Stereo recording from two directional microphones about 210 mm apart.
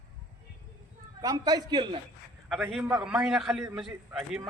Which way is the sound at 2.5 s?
Centre (ahead or behind).